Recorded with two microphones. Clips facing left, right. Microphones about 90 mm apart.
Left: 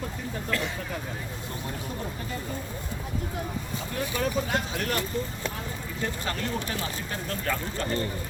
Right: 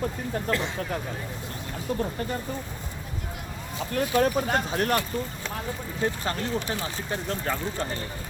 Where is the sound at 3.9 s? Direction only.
45° right (ahead or behind).